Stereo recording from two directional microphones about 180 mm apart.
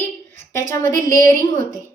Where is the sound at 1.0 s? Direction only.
15° left (ahead or behind).